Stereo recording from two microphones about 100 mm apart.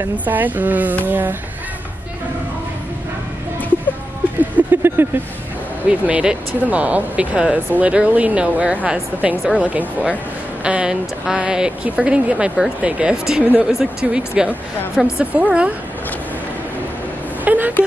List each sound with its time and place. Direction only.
0.2 s speech: 15° right (ahead or behind)
4.4 s a sound: 20° right (ahead or behind)
5.9 s speech: 10° right (ahead or behind)
17.5 s speech: 15° right (ahead or behind)